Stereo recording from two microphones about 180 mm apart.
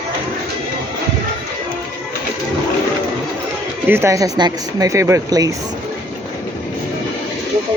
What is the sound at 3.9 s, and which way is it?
Speech, 15° right (ahead or behind).